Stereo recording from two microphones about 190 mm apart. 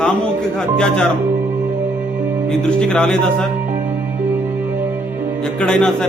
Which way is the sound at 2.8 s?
5° left (ahead or behind).